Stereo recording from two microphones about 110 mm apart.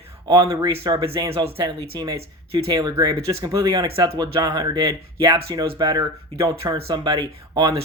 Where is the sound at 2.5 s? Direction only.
60° right (ahead or behind).